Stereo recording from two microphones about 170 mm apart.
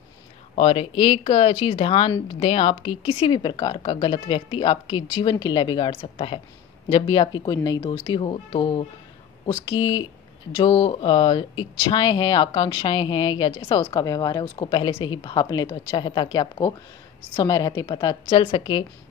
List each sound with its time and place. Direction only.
0.6 s a woman's voice: 35° left (ahead or behind)